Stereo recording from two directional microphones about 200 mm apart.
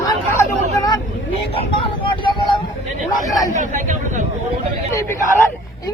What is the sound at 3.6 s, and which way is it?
Speech, 40° right (ahead or behind).